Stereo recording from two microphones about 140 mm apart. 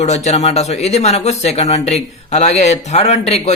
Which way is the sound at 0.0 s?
50° left (ahead or behind).